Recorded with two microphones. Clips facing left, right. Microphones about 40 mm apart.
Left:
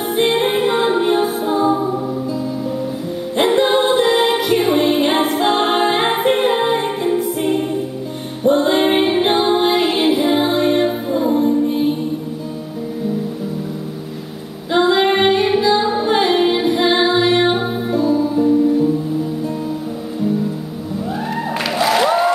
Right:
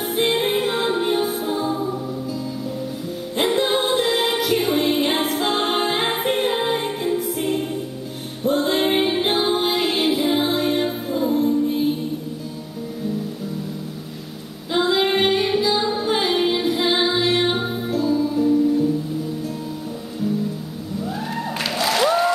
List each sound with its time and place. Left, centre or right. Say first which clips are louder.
0.1 s music: left 4 dB; centre
3.3 s music: left 5 dB; centre
14.7 s music: left 5 dB; centre
21.7 s music: left 4 dB; centre